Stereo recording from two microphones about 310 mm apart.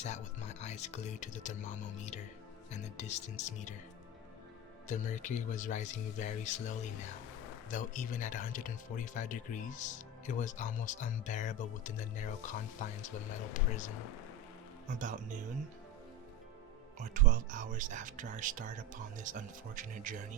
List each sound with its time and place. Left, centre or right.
0.0 s speech: left
4.9 s speech: left
14.9 s speech: right
17.0 s speech: right